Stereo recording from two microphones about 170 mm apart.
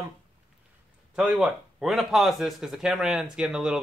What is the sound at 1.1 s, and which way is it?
Speech, 5° right (ahead or behind).